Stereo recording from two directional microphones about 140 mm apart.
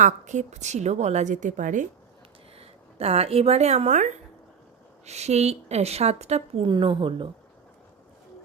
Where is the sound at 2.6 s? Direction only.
45° right (ahead or behind).